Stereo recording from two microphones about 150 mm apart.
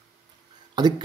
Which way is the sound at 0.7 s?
30° right (ahead or behind).